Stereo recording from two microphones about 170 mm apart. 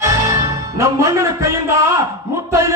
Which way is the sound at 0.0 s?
15° right (ahead or behind).